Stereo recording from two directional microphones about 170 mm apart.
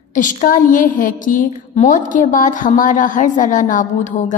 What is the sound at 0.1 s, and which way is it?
A woman's voice, 50° left (ahead or behind).